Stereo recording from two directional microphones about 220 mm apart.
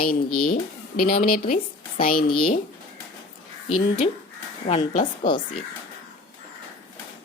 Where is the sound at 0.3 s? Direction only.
90° left.